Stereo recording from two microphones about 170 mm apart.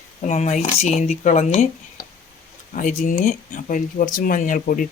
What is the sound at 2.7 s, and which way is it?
Speech, 50° left (ahead or behind).